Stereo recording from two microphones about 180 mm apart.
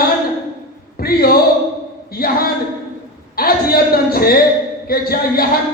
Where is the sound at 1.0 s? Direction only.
55° left (ahead or behind).